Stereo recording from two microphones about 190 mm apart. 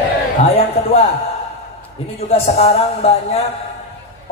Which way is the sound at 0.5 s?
30° left (ahead or behind).